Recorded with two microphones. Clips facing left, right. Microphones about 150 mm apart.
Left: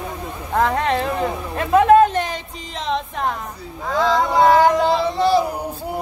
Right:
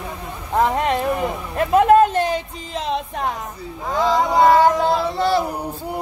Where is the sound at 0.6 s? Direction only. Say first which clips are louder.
Even; 10° right (ahead or behind).